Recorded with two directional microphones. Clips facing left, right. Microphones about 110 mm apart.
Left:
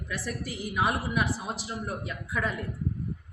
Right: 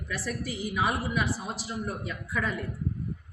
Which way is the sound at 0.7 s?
15° left (ahead or behind).